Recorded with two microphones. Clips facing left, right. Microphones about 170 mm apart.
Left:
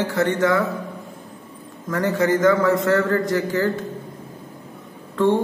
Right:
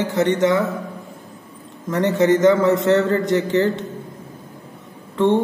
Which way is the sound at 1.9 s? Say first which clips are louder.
Right 3 dB; 25° right (ahead or behind).